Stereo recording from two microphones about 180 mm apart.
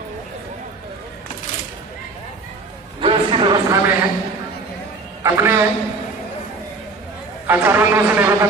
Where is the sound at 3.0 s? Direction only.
30° right (ahead or behind).